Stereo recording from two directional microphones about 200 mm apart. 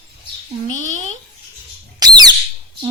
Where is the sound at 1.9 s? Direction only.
20° right (ahead or behind).